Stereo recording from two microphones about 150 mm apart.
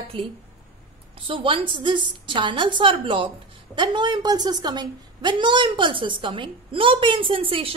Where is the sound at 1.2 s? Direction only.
35° right (ahead or behind).